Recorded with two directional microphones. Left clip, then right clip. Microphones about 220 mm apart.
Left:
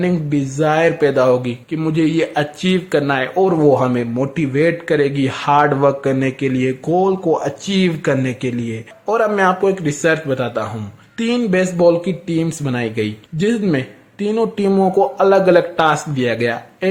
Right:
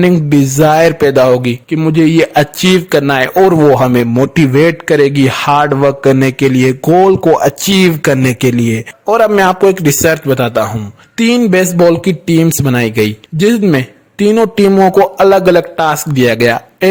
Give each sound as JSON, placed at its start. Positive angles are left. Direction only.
{"t": 0.0, "sound": "speech", "side_deg": -45}